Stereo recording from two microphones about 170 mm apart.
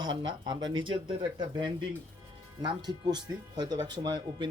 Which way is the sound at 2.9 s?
25° right (ahead or behind).